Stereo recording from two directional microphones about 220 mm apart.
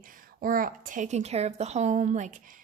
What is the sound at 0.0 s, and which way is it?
A woman's voice, 40° right (ahead or behind).